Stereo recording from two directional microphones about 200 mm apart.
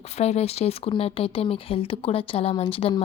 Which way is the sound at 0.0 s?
30° left (ahead or behind).